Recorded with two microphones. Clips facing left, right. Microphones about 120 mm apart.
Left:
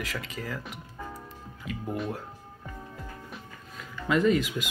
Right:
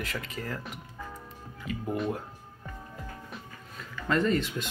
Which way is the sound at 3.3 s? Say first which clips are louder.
Even; 5° left (ahead or behind).